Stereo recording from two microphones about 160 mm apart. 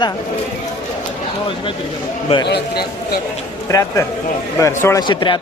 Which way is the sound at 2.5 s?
90° left.